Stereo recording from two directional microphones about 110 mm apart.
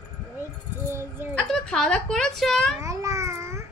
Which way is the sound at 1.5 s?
5° left (ahead or behind).